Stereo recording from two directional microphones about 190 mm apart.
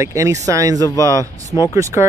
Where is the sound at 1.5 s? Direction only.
20° left (ahead or behind).